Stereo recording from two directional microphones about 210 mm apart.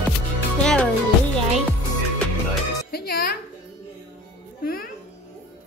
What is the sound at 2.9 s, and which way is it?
Music, 50° left (ahead or behind).